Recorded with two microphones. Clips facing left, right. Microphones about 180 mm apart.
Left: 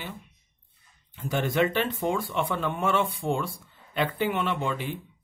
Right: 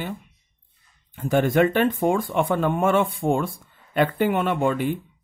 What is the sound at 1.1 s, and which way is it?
Speech, 50° right (ahead or behind).